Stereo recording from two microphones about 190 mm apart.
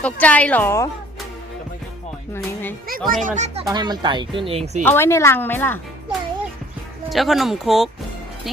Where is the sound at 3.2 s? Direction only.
40° right (ahead or behind).